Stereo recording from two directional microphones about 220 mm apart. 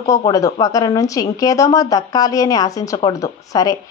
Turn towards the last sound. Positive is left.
turn(degrees=15)  # may be behind; listen again after turning